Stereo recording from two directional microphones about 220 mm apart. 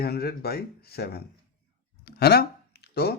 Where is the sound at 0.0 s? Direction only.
45° left (ahead or behind).